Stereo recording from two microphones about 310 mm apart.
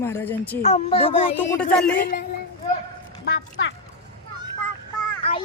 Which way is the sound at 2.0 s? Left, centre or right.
Left.